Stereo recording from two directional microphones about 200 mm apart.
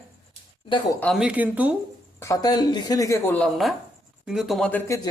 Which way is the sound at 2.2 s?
15° left (ahead or behind).